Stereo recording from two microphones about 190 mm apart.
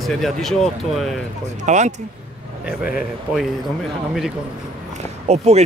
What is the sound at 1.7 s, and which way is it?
Speech, 40° right (ahead or behind).